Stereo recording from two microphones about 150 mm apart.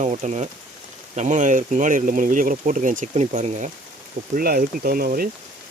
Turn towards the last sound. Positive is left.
turn(degrees=-80)